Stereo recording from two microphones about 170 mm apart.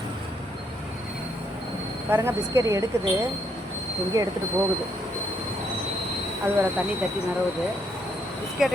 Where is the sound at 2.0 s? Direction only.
15° right (ahead or behind).